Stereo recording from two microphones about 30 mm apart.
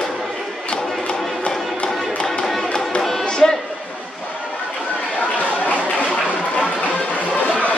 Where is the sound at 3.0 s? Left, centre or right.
Centre.